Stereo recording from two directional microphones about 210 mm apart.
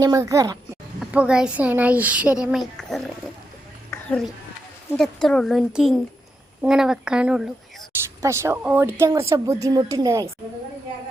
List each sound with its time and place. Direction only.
0.0 s a woman's voice: 15° right (ahead or behind)
0.9 s speech: 5° right (ahead or behind)
4.9 s a woman's voice: centre (ahead or behind); by 10.2 s 15° right (ahead or behind)